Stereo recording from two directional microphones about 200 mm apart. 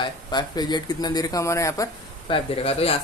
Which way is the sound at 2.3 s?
30° left (ahead or behind).